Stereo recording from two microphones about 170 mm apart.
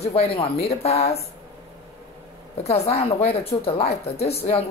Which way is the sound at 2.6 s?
40° left (ahead or behind).